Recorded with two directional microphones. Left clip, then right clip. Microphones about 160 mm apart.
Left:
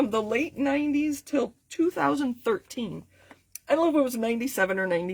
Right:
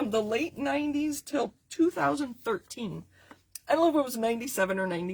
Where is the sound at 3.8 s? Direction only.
35° left (ahead or behind).